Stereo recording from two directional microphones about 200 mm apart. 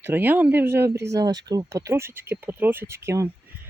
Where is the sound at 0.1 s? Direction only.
10° right (ahead or behind).